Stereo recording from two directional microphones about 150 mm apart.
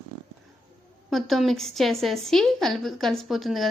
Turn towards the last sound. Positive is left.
turn(degrees=0)  # may be behind; listen again after turning